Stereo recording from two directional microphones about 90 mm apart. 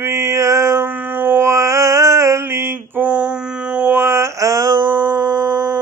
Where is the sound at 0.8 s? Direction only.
20° right (ahead or behind); by 4.7 s 35° right (ahead or behind).